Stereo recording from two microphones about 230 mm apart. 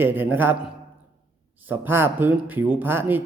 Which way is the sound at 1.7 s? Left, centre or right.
Centre.